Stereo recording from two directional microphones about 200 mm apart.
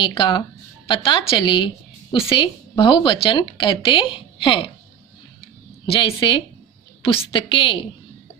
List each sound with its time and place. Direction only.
0.0 s speech: 25° left (ahead or behind)
5.8 s speech: 25° left (ahead or behind)